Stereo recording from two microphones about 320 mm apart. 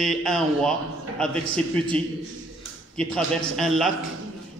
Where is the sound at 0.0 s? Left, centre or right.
Centre.